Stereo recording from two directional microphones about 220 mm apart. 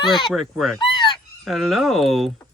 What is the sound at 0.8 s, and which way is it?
Fowl, 20° left (ahead or behind).